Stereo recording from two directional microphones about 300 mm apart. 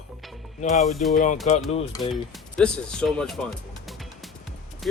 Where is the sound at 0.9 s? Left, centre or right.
Centre.